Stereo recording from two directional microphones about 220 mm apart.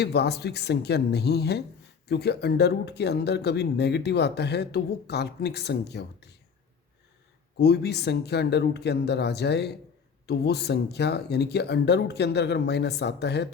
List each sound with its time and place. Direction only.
0.0 s speech: 50° left (ahead or behind)
7.6 s speech: 50° left (ahead or behind)